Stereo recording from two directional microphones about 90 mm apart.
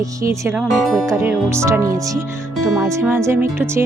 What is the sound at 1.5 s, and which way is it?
Speech, 30° right (ahead or behind).